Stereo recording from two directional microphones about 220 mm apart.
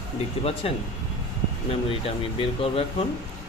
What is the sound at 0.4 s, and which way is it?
Speech, 25° left (ahead or behind).